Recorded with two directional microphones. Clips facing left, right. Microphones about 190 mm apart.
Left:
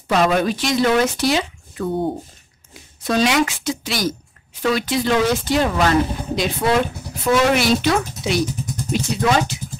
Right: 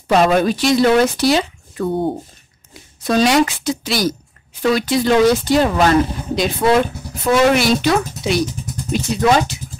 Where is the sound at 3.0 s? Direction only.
35° right (ahead or behind).